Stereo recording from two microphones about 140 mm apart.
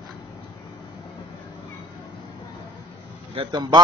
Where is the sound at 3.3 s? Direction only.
35° right (ahead or behind).